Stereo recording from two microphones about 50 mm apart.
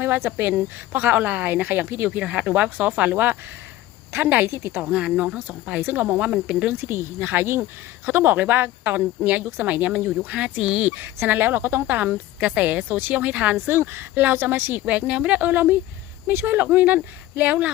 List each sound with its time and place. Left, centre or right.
0.0 s a woman's voice: right
2.1 s a woman's voice: right
4.4 s speech: right
4.9 s a woman's voice: right
6.8 s a woman's voice: right
9.0 s speech: right
10.8 s a woman's voice: right
13.3 s speech: right
13.7 s a woman's voice: right
14.2 s a woman's voice: right
14.8 s speech: right
16.2 s a woman's voice: right